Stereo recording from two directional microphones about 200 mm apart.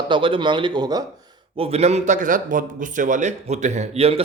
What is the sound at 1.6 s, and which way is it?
A man's voice, 30° right (ahead or behind).